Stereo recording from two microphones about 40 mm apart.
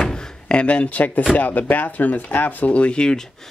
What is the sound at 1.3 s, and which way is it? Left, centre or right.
Speech, left.